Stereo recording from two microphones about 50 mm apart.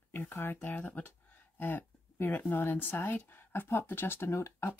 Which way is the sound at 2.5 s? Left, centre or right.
Left.